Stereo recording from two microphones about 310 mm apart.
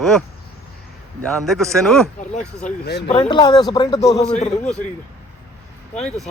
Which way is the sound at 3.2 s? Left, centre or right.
Centre.